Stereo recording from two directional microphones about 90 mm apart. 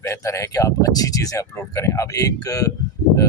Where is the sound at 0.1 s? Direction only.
35° left (ahead or behind).